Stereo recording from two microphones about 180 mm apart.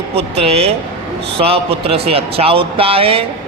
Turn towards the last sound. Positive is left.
turn(degrees=-30)  # may be behind; listen again after turning